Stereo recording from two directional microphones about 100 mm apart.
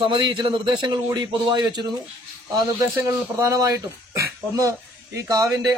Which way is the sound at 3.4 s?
35° right (ahead or behind).